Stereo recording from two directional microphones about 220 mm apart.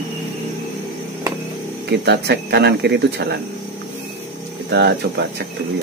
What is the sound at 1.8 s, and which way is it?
Speech, 50° right (ahead or behind).